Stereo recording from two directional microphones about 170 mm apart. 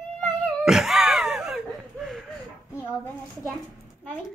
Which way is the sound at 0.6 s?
5° right (ahead or behind).